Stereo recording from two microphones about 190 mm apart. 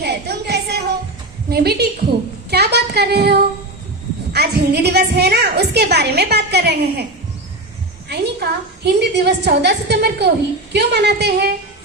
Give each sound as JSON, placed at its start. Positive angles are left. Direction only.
{"t": 0.0, "sound": "a sound", "side_deg": -60}
{"t": 1.5, "sound": "a woman's voice", "side_deg": -55}
{"t": 8.1, "sound": "a woman's voice", "side_deg": -60}